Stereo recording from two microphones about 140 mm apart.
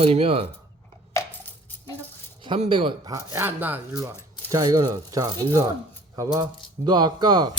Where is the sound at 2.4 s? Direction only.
35° right (ahead or behind).